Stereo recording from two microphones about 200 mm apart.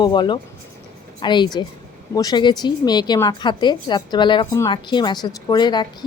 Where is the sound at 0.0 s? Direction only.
20° left (ahead or behind).